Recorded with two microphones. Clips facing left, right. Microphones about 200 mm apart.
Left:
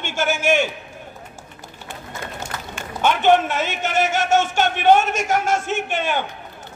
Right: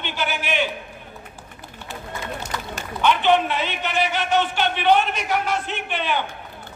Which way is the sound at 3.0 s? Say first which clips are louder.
Left 2 dB; 45° left (ahead or behind).